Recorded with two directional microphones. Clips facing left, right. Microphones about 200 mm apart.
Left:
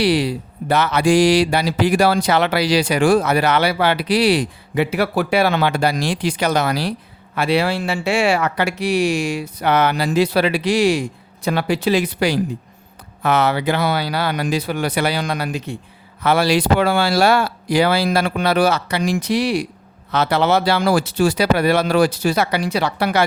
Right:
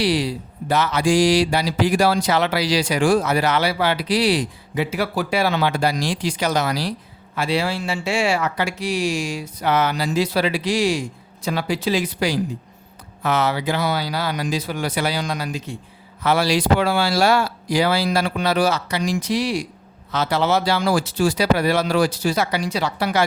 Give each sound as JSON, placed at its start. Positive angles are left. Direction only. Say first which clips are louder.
{"t": 0.0, "sound": "mantra", "louder": "left 3 dB", "side_deg": 60}